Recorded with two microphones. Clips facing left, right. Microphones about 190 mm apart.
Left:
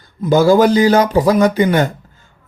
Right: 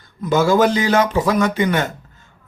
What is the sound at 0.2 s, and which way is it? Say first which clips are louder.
A man's voice: left 4 dB; 35° left (ahead or behind).